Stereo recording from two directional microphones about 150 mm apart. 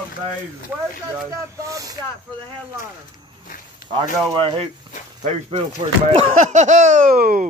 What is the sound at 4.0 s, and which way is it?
Speech, 35° right (ahead or behind).